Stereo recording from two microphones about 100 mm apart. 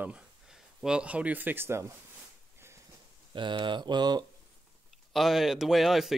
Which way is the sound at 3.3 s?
50° right (ahead or behind).